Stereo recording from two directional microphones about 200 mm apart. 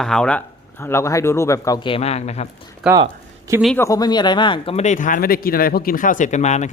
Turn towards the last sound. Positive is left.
turn(degrees=35)  # may be behind; listen again after turning